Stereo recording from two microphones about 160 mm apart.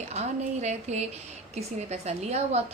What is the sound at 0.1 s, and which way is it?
A woman's voice, 45° right (ahead or behind).